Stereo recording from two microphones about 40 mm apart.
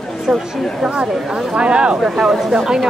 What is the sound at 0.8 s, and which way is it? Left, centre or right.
Speech, right.